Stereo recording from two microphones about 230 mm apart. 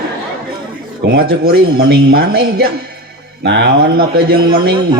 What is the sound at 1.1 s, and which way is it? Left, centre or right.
A man's voice, right.